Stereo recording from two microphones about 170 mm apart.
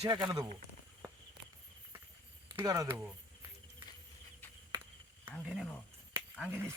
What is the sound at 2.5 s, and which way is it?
Speech, 20° right (ahead or behind).